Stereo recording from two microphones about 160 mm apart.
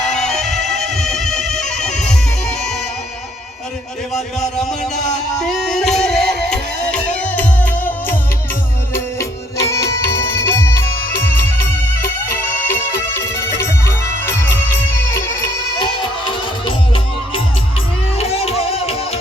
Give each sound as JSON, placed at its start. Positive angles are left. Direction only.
{"t": 0.0, "sound": "music", "side_deg": 5}
{"t": 4.1, "sound": "a sound", "side_deg": 5}
{"t": 5.4, "sound": "music", "side_deg": 5}
{"t": 12.3, "sound": "music", "side_deg": 15}
{"t": 15.8, "sound": "music", "side_deg": 30}